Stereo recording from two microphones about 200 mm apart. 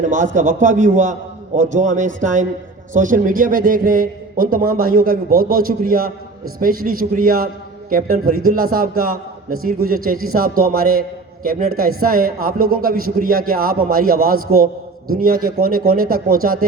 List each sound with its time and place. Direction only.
0.0 s a man's voice: 40° right (ahead or behind)